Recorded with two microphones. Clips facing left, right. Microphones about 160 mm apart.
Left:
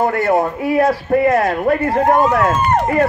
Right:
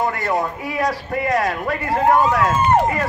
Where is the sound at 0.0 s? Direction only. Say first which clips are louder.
Left 6 dB; 50° left (ahead or behind).